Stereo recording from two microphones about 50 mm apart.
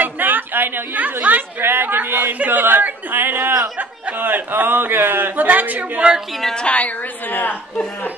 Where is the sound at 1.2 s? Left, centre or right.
Right.